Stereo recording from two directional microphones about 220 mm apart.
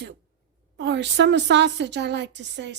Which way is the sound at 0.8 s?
55° right (ahead or behind).